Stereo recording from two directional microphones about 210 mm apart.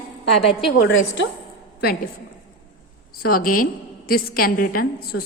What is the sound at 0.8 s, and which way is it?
Speech, 55° left (ahead or behind).